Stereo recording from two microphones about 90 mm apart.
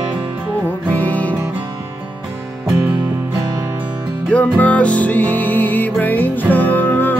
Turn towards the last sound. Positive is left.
turn(degrees=20)  # may be behind; listen again after turning